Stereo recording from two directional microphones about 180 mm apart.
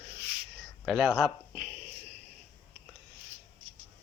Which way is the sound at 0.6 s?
Centre (ahead or behind).